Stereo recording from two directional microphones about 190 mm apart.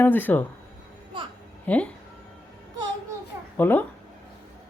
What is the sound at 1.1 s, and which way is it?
Speech, 25° right (ahead or behind).